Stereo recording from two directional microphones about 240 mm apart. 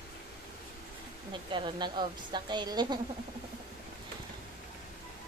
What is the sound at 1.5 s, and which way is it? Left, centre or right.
Speech, centre.